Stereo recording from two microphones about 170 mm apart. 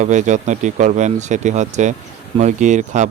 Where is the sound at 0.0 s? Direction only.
45° right (ahead or behind).